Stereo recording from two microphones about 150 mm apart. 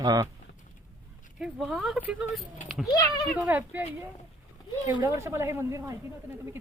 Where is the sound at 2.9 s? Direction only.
25° left (ahead or behind).